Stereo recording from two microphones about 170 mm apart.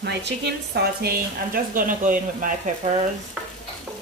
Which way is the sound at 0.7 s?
60° right (ahead or behind).